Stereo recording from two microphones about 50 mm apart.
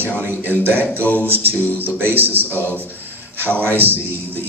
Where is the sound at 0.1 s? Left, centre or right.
Left.